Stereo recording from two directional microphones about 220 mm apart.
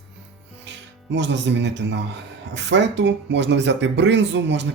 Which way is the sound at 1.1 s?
55° right (ahead or behind).